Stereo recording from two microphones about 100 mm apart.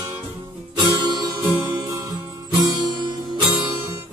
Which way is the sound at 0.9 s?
45° right (ahead or behind).